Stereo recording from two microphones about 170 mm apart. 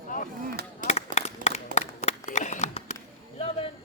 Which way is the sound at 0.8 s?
45° left (ahead or behind).